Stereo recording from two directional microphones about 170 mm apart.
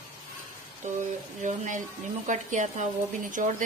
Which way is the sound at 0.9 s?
45° right (ahead or behind).